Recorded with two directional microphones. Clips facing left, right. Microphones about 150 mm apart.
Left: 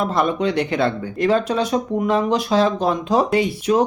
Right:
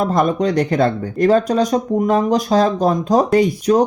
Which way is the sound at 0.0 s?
40° right (ahead or behind).